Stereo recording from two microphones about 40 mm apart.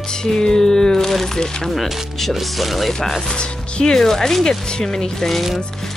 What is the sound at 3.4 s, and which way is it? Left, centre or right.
Speech, left.